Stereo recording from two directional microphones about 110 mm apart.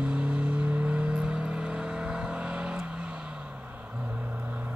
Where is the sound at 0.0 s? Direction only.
10° right (ahead or behind).